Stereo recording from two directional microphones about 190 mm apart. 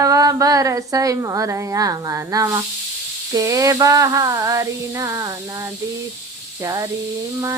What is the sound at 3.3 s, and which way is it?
Female singing, 15° right (ahead or behind).